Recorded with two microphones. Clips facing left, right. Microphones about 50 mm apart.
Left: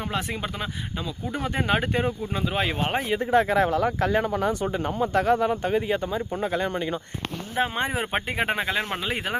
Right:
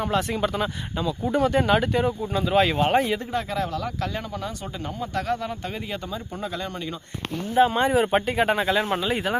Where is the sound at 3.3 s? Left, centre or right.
Left.